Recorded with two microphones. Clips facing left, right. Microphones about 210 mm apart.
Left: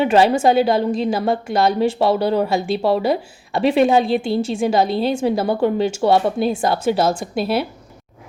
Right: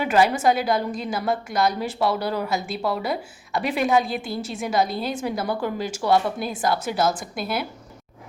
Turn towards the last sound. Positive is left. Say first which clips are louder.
# left 8 dB
turn(degrees=30)  # may be behind; listen again after turning